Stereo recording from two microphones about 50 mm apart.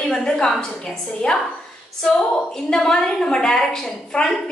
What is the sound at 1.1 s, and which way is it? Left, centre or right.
A woman's voice, left.